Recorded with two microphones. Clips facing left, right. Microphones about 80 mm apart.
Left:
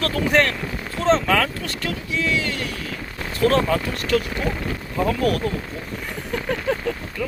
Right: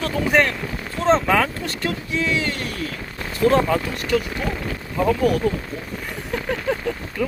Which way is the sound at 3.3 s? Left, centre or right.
Right.